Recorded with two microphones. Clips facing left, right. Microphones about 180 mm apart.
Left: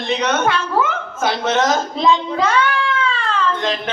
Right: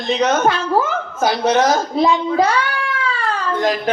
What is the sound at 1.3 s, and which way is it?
Speech, 25° left (ahead or behind).